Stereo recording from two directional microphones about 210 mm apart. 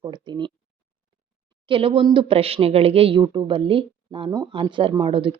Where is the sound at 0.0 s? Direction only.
20° right (ahead or behind).